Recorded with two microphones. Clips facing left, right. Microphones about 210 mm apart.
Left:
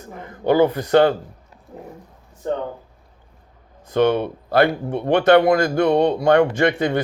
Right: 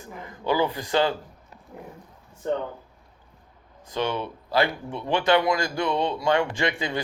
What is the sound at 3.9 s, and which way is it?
Speech, 55° left (ahead or behind).